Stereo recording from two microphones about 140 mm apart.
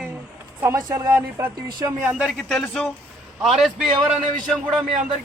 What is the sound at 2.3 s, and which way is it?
Speech, 5° left (ahead or behind).